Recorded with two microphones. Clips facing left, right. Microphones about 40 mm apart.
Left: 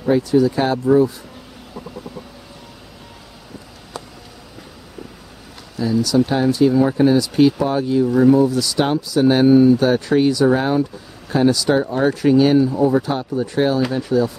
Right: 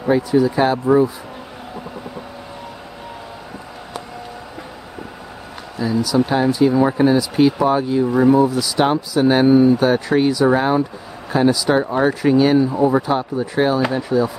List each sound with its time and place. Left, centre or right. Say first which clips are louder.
0.1 s speech: even; centre
5.8 s speech: left 1 dB; centre